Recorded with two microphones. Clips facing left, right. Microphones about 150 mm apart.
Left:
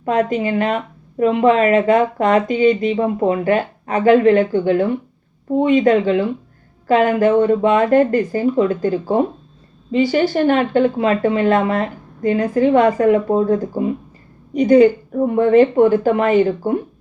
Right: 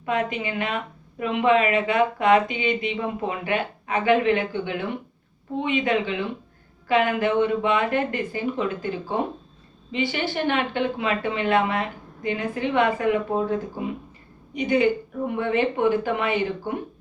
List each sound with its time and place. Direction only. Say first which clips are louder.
0.0 s speech: left 8 dB; 40° left (ahead or behind)